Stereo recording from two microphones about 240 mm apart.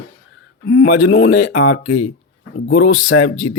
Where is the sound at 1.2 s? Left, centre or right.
Left.